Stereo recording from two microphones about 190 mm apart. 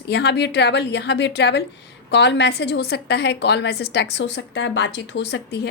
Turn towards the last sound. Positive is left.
turn(degrees=65)  # may be behind; listen again after turning